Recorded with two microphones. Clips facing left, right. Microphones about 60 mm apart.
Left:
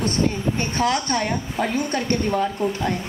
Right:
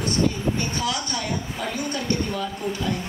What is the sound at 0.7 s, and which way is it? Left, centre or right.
A woman's voice, left.